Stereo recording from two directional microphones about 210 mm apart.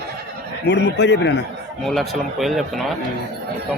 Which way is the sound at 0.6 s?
55° left (ahead or behind).